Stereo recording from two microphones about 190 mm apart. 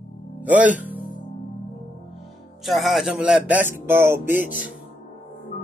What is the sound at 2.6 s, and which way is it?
Speech, centre (ahead or behind).